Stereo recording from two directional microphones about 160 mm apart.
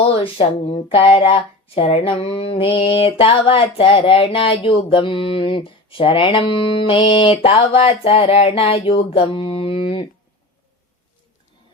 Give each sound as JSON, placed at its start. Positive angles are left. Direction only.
{"t": 0.2, "sound": "speech", "side_deg": 35}